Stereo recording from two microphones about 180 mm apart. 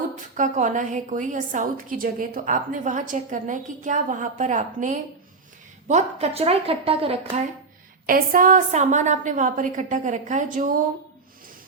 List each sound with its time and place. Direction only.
0.3 s a woman's voice: 45° right (ahead or behind)
8.0 s a woman's voice: 50° right (ahead or behind)